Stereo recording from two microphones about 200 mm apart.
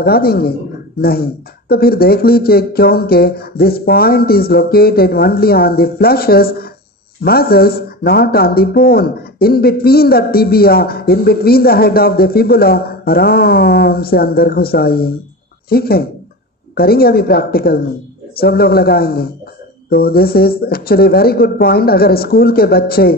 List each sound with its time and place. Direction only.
0.0 s speech: 50° left (ahead or behind)